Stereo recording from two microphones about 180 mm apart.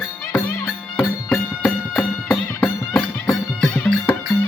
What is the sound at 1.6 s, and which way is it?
Music, centre (ahead or behind).